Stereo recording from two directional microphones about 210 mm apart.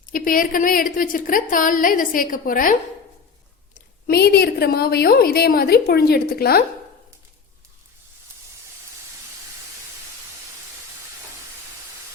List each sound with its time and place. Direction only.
0.0 s a woman's voice: 40° left (ahead or behind)
3.8 s a woman's voice: 45° left (ahead or behind)